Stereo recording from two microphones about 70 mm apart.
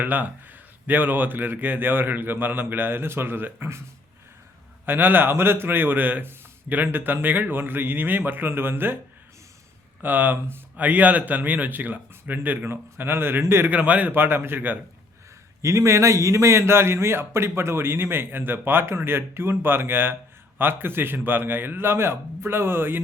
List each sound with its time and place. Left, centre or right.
0.0 s a man's voice: right
4.9 s a man's voice: right
10.0 s a man's voice: right
13.7 s a man's voice: right
15.6 s a man's voice: right